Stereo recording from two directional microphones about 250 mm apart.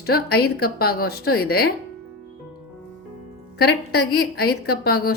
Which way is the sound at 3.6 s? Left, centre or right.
Left.